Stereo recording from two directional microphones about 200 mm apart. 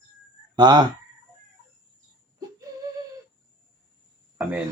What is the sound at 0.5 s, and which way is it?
Speech, 20° right (ahead or behind).